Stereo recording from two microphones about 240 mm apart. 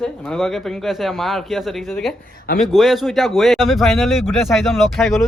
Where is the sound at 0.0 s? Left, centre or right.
Centre.